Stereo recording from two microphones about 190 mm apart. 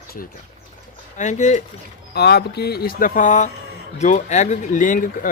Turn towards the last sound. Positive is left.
turn(degrees=45)  # may be behind; listen again after turning